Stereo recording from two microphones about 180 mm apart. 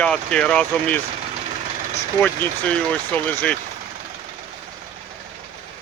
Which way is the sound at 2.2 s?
10° left (ahead or behind).